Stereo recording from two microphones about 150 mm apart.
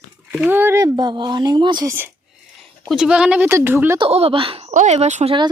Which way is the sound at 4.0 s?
40° right (ahead or behind).